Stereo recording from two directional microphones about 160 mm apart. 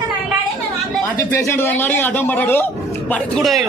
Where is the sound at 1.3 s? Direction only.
15° left (ahead or behind).